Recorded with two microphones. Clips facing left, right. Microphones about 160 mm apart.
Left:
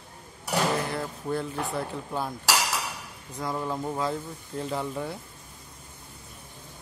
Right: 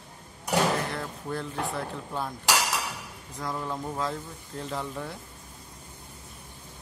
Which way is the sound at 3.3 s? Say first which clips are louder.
Left 2 dB; 5° left (ahead or behind).